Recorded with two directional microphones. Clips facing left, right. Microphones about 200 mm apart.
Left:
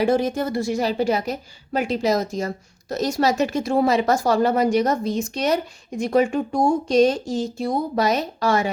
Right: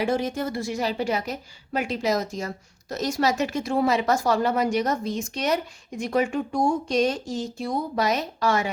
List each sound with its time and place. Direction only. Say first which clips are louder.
0.0 s speech: left 5 dB; 40° left (ahead or behind)